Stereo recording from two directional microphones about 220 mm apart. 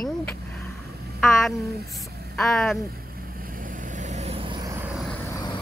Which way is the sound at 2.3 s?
Centre (ahead or behind).